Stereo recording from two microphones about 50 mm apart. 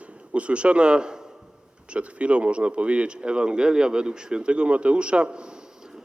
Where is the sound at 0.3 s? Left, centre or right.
Right.